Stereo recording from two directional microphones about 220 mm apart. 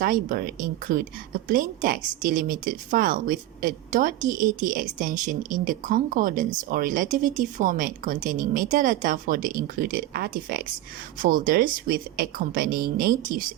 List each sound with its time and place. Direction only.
0.0 s a woman's voice: 40° right (ahead or behind)